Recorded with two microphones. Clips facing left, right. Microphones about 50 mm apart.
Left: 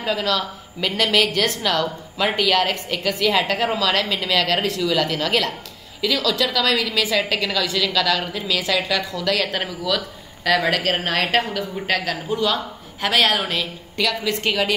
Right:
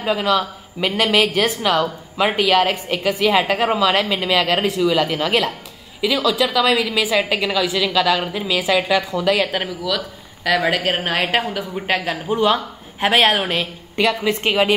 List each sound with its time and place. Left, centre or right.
0.0 s speech: centre